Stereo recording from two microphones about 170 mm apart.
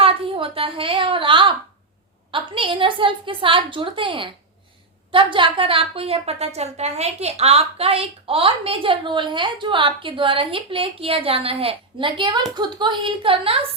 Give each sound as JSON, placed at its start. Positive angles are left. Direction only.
{"t": 0.0, "sound": "a woman's voice", "side_deg": -30}